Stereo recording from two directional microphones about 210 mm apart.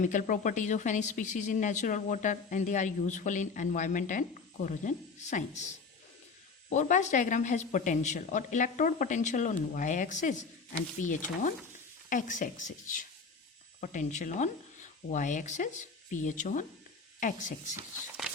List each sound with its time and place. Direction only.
0.0 s speech: 40° left (ahead or behind)
6.7 s speech: 35° left (ahead or behind)